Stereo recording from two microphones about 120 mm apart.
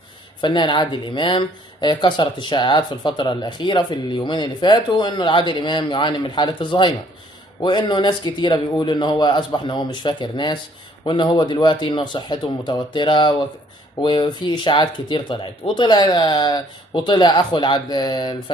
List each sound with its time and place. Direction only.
0.4 s speech: 40° left (ahead or behind)